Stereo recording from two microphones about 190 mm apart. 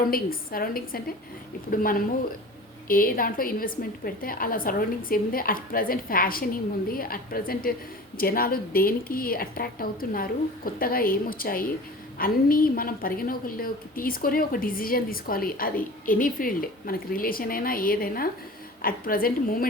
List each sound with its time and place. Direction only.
0.1 s a woman's voice: 50° left (ahead or behind)